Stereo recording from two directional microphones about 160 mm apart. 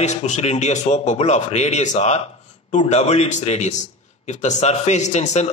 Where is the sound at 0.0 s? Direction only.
45° left (ahead or behind).